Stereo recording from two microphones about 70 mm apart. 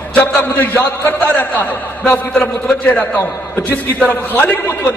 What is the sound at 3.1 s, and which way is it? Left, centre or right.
A man's voice, left.